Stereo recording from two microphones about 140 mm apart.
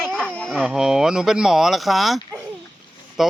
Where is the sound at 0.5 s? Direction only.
5° right (ahead or behind).